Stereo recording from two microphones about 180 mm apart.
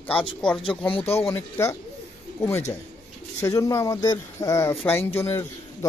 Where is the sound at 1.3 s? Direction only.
15° left (ahead or behind).